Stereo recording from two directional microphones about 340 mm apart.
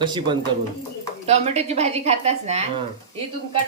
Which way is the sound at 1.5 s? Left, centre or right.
Centre.